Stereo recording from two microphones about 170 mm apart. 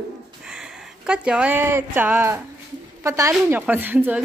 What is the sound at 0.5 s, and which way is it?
A woman's voice, 5° right (ahead or behind).